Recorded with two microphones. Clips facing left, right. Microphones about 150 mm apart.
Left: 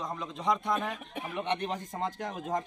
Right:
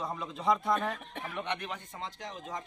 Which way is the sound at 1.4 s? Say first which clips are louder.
Left 5 dB; 35° left (ahead or behind).